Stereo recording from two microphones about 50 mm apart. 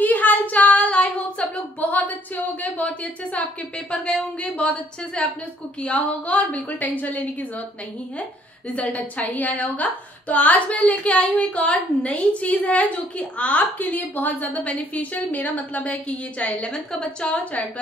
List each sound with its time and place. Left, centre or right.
0.0 s a sound: left
3.9 s a woman's voice: left
8.7 s a woman's voice: left
16.7 s a woman's voice: centre